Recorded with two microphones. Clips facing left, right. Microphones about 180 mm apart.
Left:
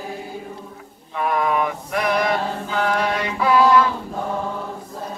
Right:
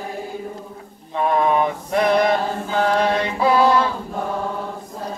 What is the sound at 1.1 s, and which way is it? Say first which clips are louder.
Chant: right 3 dB; 30° right (ahead or behind).